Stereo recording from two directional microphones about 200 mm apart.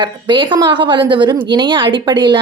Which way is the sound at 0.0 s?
25° right (ahead or behind).